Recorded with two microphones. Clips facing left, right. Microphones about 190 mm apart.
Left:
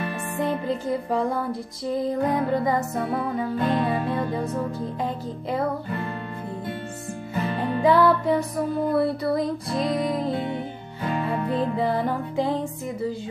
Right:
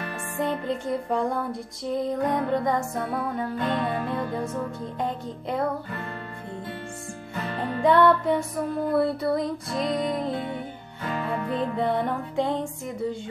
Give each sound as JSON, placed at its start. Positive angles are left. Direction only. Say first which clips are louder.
{"t": 0.4, "sound": "music", "louder": "left 1 dB", "side_deg": 0}
{"t": 7.8, "sound": "music", "louder": "even", "side_deg": 5}
{"t": 11.4, "sound": "music", "louder": "left 3 dB", "side_deg": 35}
{"t": 11.7, "sound": "music", "louder": "left 1 dB", "side_deg": 0}